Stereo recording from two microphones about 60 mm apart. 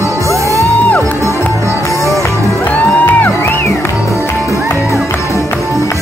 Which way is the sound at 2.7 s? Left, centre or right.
Left.